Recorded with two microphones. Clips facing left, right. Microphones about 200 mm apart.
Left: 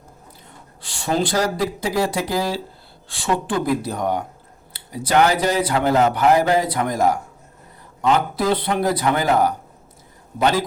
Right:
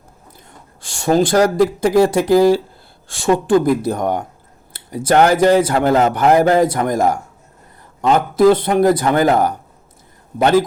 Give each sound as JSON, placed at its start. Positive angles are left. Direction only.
{"t": 0.8, "sound": "speech", "side_deg": -45}